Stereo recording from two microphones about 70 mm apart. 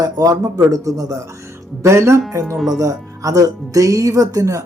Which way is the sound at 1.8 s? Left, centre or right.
Right.